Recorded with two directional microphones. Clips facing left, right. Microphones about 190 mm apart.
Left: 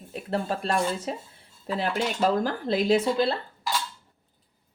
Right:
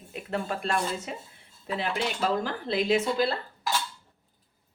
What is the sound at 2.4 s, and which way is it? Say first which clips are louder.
Speech: left 3 dB; 40° left (ahead or behind).